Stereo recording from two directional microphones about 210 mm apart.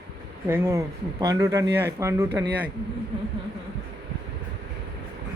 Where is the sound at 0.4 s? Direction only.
10° right (ahead or behind).